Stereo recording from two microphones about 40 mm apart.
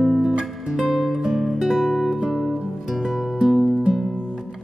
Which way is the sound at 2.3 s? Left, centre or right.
Centre.